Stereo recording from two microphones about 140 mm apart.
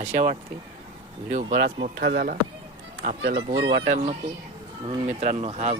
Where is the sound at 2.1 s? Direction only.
90° right.